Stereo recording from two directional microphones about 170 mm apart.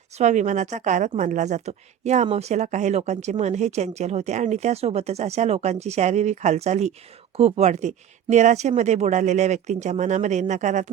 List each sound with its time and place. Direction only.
0.2 s speech: 45° right (ahead or behind)